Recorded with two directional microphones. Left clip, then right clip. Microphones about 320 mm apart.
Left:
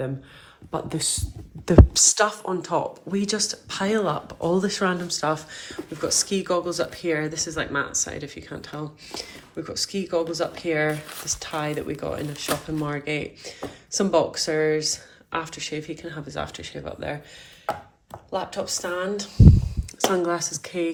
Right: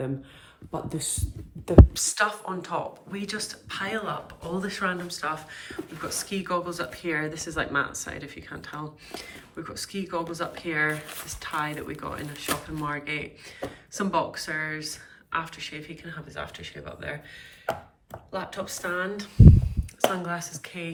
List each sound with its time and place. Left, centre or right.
0.7 s a woman's voice: centre
18.3 s a woman's voice: centre